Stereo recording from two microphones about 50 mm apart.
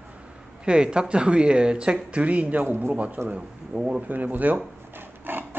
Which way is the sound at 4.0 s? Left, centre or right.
Right.